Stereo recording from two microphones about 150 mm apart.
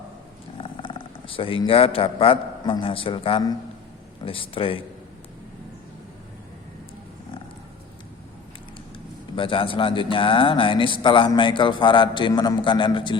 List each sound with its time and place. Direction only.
0.6 s a man's voice: 35° left (ahead or behind)
9.3 s speech: 35° left (ahead or behind)